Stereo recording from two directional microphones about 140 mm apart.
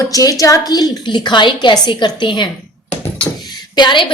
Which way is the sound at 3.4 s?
30° left (ahead or behind).